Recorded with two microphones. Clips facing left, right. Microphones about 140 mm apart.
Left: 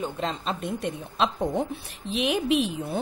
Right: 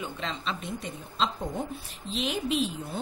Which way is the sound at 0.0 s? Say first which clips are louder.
Left 5 dB; 45° left (ahead or behind).